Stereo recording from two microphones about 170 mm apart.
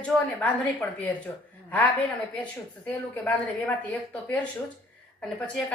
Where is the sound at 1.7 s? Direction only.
10° left (ahead or behind).